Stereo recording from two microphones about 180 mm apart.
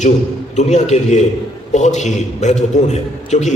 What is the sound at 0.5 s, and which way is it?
A man's voice, 40° left (ahead or behind).